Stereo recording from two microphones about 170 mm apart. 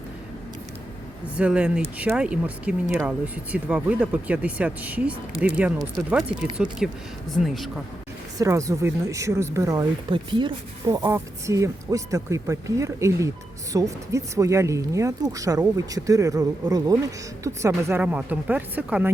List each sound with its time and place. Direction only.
1.4 s speech: 5° right (ahead or behind)
8.4 s speech: 20° right (ahead or behind)